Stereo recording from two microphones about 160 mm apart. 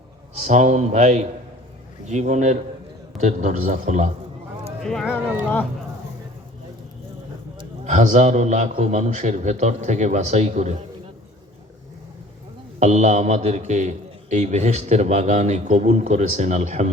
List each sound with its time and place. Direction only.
0.3 s a man's voice: 45° right (ahead or behind)
4.8 s speech: centre (ahead or behind)
7.9 s a man's voice: 50° right (ahead or behind)
12.8 s a man's voice: 45° right (ahead or behind)